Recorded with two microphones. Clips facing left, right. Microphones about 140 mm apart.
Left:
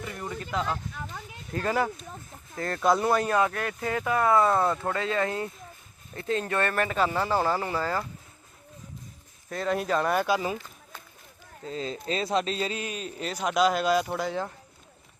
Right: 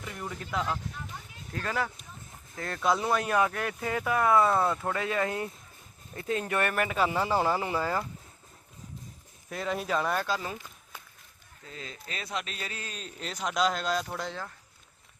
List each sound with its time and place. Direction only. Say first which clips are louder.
0.0 s speech: left 3 dB; centre (ahead or behind)
1.5 s speech: left 5 dB; 10° left (ahead or behind)
2.6 s speech: left 4 dB; centre (ahead or behind)
3.3 s speech: left 2 dB; 10° right (ahead or behind)
4.9 s speech: left 2 dB; 15° right (ahead or behind)
9.5 s speech: left 4 dB; 5° right (ahead or behind)
10.2 s speech: left 6 dB; 10° left (ahead or behind)
11.6 s speech: left 11 dB; 30° left (ahead or behind)
13.0 s speech: left 5 dB; 5° left (ahead or behind)